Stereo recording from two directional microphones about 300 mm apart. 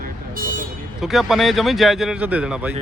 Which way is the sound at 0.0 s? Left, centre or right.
Right.